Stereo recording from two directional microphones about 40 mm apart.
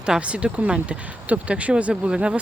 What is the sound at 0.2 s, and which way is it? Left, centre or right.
Speech, right.